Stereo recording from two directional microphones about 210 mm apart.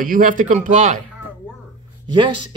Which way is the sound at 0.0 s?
40° right (ahead or behind).